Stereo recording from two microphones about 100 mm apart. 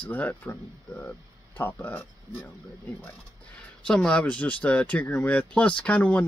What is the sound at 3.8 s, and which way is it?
Speech, 10° left (ahead or behind).